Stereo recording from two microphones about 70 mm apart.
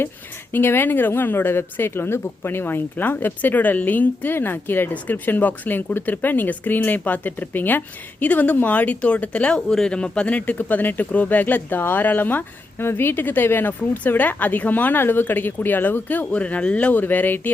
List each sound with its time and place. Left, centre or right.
0.5 s speech: left